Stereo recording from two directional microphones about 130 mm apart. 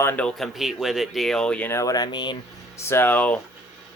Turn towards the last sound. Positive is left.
turn(degrees=10)  # may be behind; listen again after turning